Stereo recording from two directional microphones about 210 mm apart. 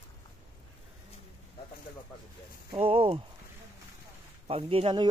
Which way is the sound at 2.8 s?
25° right (ahead or behind).